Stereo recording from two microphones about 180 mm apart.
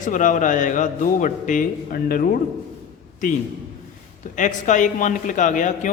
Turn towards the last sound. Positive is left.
turn(degrees=45)  # may be behind; listen again after turning